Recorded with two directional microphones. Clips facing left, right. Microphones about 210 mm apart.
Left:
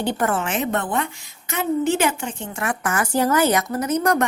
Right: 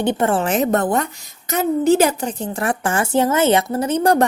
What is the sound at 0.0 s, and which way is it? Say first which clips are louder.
A woman's voice: right 4 dB; 25° right (ahead or behind).